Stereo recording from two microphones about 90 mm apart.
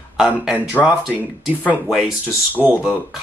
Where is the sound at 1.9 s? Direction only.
Centre (ahead or behind).